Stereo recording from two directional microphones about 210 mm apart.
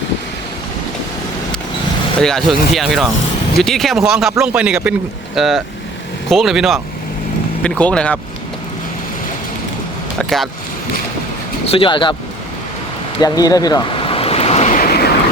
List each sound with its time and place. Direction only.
2.2 s a man's voice: centre (ahead or behind)
10.2 s speech: centre (ahead or behind)
11.7 s speech: 25° left (ahead or behind)
13.1 s waves: 15° left (ahead or behind); by 15.1 s 45° left (ahead or behind)